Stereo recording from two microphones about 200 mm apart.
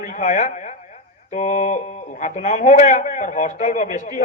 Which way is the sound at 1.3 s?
35° left (ahead or behind).